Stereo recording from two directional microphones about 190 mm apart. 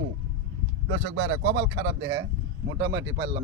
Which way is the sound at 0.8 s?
70° right (ahead or behind).